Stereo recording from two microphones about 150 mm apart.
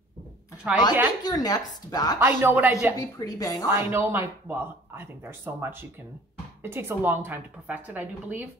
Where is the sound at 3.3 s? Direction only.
25° left (ahead or behind).